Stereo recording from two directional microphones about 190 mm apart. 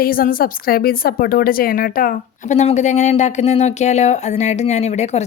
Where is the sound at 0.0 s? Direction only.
50° left (ahead or behind).